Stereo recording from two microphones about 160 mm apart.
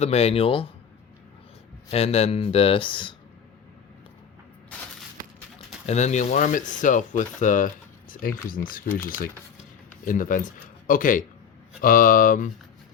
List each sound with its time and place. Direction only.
0.0 s speech: 40° left (ahead or behind)
1.9 s speech: 40° left (ahead or behind)
5.8 s speech: 45° left (ahead or behind)